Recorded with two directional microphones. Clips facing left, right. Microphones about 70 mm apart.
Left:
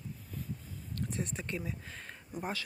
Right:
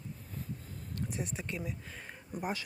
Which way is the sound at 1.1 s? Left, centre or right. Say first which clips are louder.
Left 2 dB; centre.